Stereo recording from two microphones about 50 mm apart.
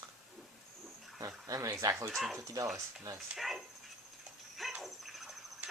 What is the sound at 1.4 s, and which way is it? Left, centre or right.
Speech, right.